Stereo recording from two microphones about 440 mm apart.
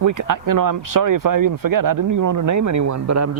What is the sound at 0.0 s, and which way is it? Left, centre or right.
Speech, right.